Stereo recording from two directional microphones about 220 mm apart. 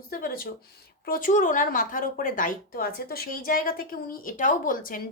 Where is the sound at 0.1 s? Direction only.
40° left (ahead or behind).